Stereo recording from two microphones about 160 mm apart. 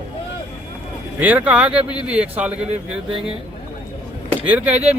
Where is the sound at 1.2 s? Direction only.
10° right (ahead or behind).